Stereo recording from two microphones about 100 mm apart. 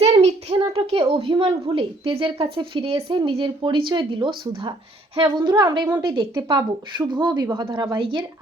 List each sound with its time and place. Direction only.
0.0 s a child's voice: 90° right; by 4.7 s 55° right (ahead or behind)
5.2 s speech: 45° right (ahead or behind)